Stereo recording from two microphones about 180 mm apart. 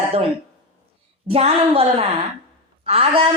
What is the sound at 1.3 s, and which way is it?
A man's voice, 35° right (ahead or behind).